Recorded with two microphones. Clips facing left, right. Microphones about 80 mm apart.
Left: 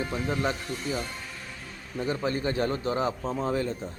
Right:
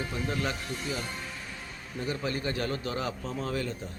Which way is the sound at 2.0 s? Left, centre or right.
Left.